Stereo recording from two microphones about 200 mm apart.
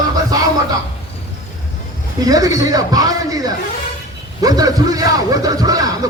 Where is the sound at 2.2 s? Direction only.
20° right (ahead or behind).